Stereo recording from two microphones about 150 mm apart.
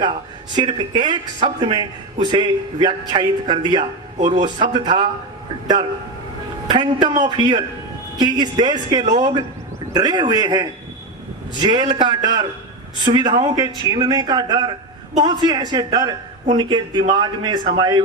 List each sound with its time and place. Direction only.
0.5 s a man's voice: 30° right (ahead or behind)
6.7 s a man's voice: 30° right (ahead or behind)